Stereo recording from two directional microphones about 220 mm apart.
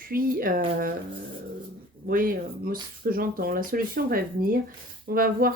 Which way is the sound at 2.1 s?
40° right (ahead or behind).